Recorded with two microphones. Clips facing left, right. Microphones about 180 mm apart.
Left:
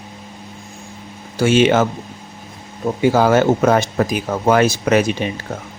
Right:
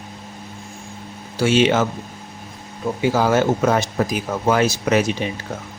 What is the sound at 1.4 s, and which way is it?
Speech, 50° left (ahead or behind).